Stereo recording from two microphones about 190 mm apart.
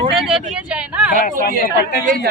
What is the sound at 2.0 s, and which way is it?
Speech, 50° right (ahead or behind).